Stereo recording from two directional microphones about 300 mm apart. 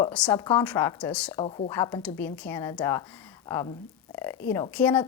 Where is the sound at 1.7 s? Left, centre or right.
Centre.